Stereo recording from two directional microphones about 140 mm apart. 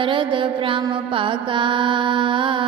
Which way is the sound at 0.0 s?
35° right (ahead or behind).